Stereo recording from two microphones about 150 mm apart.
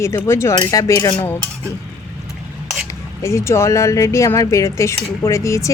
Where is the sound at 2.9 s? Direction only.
20° left (ahead or behind).